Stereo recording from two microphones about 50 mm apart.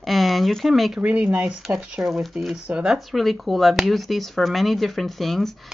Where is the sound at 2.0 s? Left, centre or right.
Centre.